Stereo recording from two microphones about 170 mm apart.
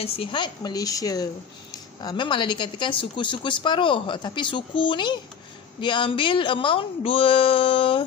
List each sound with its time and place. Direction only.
0.0 s speech: 35° left (ahead or behind)